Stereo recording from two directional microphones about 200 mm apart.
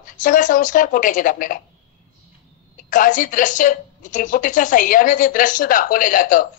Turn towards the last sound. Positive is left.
turn(degrees=40)  # may be behind; listen again after turning